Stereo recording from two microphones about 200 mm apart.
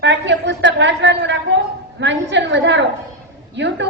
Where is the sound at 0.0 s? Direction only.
60° right (ahead or behind).